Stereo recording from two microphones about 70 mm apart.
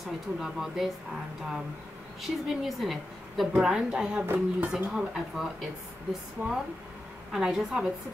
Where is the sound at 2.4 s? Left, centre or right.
Centre.